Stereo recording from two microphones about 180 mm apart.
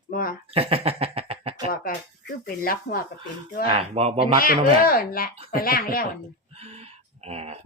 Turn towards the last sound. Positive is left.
turn(degrees=-35)  # may be behind; listen again after turning